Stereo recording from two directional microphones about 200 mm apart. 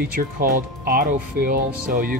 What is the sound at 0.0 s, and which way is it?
Speech, 45° right (ahead or behind).